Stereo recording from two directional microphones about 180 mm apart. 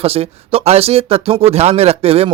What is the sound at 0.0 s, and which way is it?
Speech, 35° right (ahead or behind).